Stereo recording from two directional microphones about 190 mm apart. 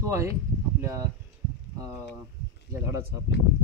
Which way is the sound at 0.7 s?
15° right (ahead or behind).